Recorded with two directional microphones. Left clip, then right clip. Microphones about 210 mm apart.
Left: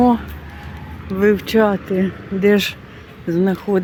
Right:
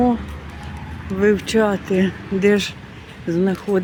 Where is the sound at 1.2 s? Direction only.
15° left (ahead or behind).